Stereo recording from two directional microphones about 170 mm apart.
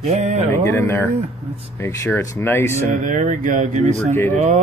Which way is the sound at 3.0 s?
50° right (ahead or behind).